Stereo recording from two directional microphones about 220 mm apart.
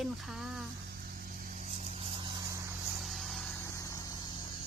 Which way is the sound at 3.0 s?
Centre (ahead or behind).